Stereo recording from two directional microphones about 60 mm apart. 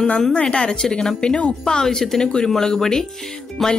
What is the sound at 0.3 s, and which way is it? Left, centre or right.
A woman's voice, centre.